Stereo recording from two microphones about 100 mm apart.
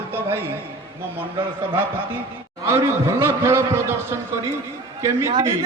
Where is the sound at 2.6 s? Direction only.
25° right (ahead or behind).